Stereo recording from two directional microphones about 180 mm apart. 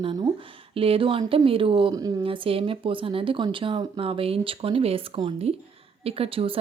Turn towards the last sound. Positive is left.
turn(degrees=-30)  # may be behind; listen again after turning